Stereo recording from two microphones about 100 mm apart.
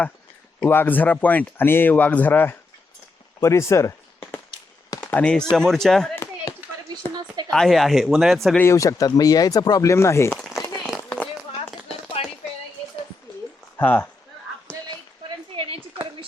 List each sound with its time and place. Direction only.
0.6 s speech: 20° left (ahead or behind)
5.1 s speech: 10° left (ahead or behind)
7.2 s a sound: 45° right (ahead or behind)
7.5 s speech: centre (ahead or behind)
8.5 s speech: 30° left (ahead or behind)
10.3 s run: centre (ahead or behind)
12.2 s a sound: 75° left (ahead or behind)
13.7 s speech: 20° left (ahead or behind)
15.5 s a sound: 60° right (ahead or behind)